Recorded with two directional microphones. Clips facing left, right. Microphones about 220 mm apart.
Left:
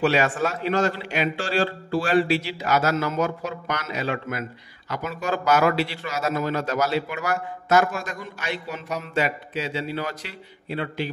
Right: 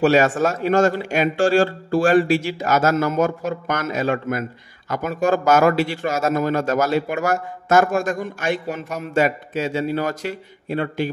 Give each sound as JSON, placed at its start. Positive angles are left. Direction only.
{"t": 0.0, "sound": "a man's voice", "side_deg": -45}